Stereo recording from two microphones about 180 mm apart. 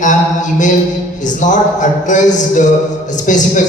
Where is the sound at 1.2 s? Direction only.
45° left (ahead or behind).